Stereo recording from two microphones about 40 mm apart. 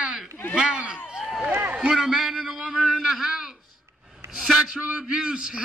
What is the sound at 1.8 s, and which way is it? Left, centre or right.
A man's voice, centre.